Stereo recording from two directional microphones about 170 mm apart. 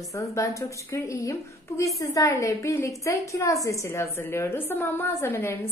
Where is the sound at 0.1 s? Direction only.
20° left (ahead or behind).